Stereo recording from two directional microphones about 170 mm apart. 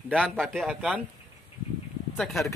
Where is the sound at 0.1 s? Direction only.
5° left (ahead or behind).